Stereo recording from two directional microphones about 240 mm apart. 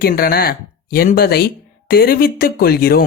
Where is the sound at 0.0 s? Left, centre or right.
Left.